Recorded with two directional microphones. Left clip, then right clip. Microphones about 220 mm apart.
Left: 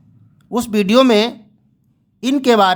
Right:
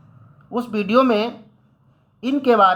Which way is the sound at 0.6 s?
35° left (ahead or behind).